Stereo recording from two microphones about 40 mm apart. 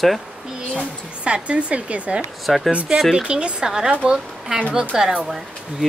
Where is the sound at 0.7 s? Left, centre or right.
Right.